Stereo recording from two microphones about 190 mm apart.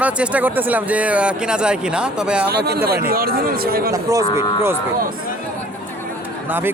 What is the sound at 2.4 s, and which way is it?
Speech, 55° right (ahead or behind).